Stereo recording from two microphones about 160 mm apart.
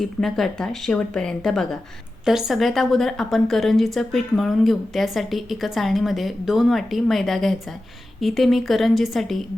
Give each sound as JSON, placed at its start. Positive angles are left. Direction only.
{"t": 0.0, "sound": "a woman's voice", "side_deg": 0}